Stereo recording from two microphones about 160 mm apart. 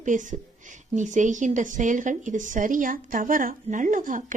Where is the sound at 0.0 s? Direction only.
50° right (ahead or behind).